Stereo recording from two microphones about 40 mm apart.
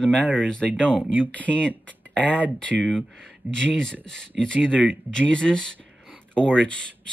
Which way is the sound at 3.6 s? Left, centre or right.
Centre.